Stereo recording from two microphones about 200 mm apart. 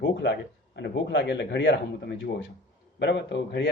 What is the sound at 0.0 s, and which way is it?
Speech, 65° left (ahead or behind).